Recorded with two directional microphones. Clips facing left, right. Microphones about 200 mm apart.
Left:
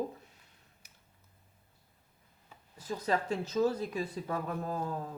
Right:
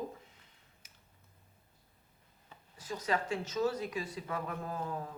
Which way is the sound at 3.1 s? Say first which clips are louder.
Left 2 dB; 35° left (ahead or behind).